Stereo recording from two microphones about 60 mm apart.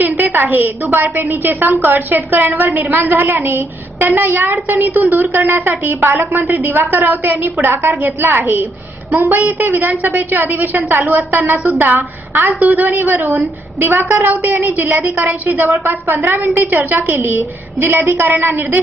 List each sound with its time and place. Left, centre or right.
0.0 s a woman's voice: right